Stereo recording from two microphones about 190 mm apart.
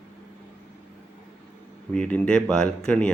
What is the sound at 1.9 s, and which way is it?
Speech, 5° left (ahead or behind).